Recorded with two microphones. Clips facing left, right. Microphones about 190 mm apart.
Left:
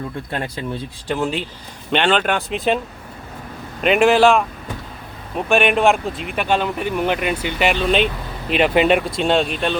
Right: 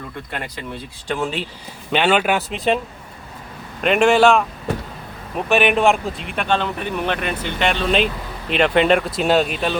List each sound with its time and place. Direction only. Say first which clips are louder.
0.3 s speech: left 3 dB; 30° left (ahead or behind)
1.0 s speech: left 1 dB; centre (ahead or behind)
3.8 s speech: left 1 dB; centre (ahead or behind)
5.5 s speech: even; centre (ahead or behind)